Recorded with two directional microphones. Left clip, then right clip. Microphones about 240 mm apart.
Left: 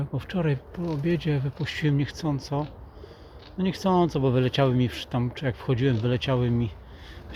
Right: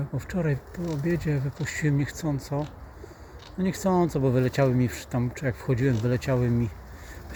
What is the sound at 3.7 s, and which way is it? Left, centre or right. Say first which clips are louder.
Speech: left 1 dB; centre.